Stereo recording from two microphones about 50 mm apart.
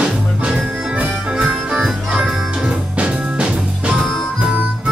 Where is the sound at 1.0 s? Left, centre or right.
Right.